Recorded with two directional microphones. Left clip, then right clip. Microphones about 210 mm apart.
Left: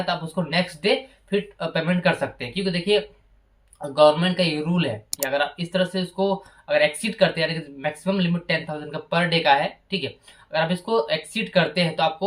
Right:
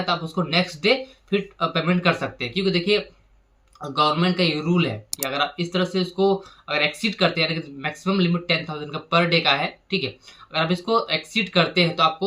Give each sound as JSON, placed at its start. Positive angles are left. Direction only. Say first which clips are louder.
{"t": 0.0, "sound": "speech", "louder": "right 2 dB", "side_deg": 0}